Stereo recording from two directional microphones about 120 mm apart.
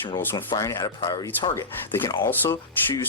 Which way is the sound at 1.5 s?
20° left (ahead or behind).